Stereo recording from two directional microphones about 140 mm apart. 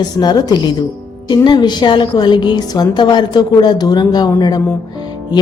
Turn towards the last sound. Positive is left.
turn(degrees=30)  # may be behind; listen again after turning